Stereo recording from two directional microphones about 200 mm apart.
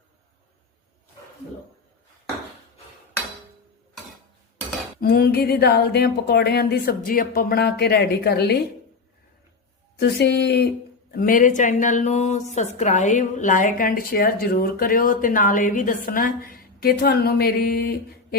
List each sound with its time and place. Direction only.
4.9 s a woman's voice: 50° left (ahead or behind)
10.0 s speech: 60° left (ahead or behind)
11.1 s a woman's voice: 45° left (ahead or behind)